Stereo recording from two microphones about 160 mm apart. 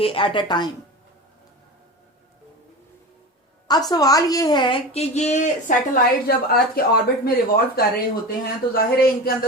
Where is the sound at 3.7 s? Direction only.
25° left (ahead or behind).